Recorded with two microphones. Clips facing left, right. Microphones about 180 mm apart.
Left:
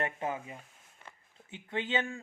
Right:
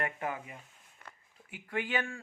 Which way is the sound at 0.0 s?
25° left (ahead or behind).